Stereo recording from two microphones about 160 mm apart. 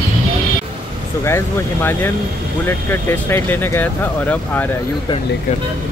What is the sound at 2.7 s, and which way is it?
Speech, 15° left (ahead or behind).